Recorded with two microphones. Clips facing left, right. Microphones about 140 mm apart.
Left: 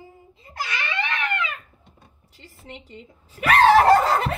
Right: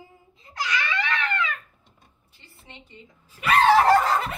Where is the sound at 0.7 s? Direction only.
20° left (ahead or behind).